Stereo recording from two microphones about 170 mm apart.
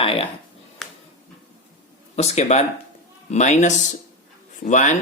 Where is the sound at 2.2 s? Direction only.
40° left (ahead or behind).